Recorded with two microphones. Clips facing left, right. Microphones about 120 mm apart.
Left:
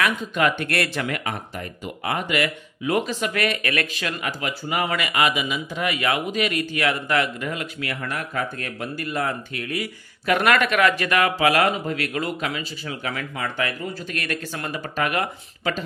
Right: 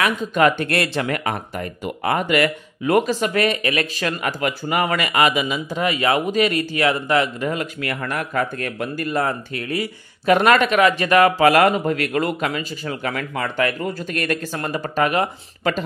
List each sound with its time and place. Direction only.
0.3 s speech: 40° right (ahead or behind)
0.7 s speech: 25° right (ahead or behind)
1.0 s speech: 45° right (ahead or behind); by 3.9 s 25° right (ahead or behind)
3.9 s speech: 45° right (ahead or behind)
7.8 s speech: 50° right (ahead or behind)